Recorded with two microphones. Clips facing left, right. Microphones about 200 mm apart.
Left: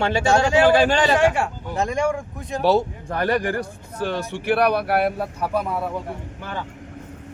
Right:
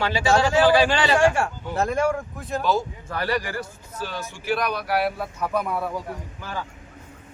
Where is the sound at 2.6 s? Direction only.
65° left (ahead or behind); by 5.3 s 50° left (ahead or behind).